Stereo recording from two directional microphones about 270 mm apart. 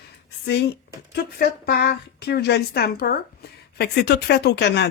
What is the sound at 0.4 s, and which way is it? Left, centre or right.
Speech, left.